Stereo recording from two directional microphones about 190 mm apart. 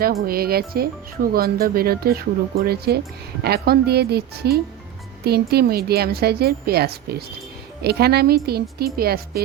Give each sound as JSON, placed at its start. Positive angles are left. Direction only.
{"t": 0.0, "sound": "a woman's voice", "side_deg": -50}